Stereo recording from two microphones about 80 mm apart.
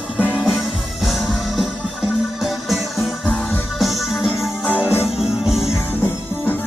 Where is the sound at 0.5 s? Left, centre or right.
Centre.